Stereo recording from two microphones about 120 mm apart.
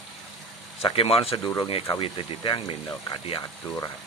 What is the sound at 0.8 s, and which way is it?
Speech, 50° left (ahead or behind).